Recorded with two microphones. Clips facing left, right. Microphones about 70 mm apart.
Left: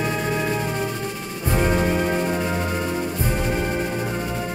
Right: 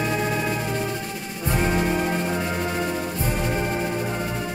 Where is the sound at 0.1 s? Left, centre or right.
Centre.